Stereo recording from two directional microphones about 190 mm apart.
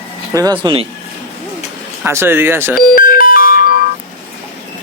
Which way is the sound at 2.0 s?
10° right (ahead or behind).